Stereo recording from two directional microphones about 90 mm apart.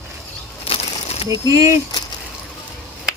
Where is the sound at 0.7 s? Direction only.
90° left.